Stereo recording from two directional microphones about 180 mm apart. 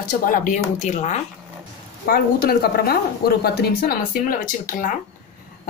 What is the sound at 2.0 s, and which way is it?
A woman's voice, 55° left (ahead or behind).